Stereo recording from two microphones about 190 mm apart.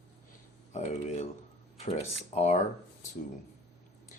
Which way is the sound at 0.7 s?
35° left (ahead or behind).